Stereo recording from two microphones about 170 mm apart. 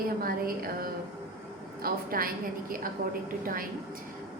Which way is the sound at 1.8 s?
60° right (ahead or behind).